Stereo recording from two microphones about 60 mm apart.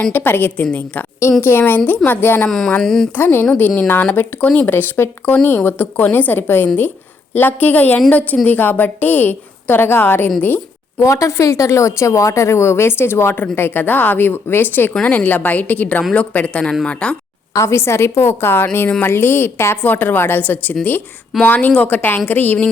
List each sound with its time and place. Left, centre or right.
0.1 s a woman's voice: left
0.5 s a woman's voice: left
1.4 s a woman's voice: left
2.5 s speech: centre
3.2 s a woman's voice: left
4.6 s a woman's voice: left
11.0 s a woman's voice: left
15.0 s a woman's voice: left
17.5 s a woman's voice: left